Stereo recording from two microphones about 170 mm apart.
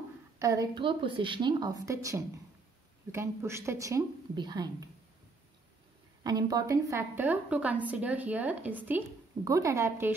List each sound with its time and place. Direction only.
0.4 s a woman's voice: 20° right (ahead or behind)
6.2 s a woman's voice: 20° right (ahead or behind)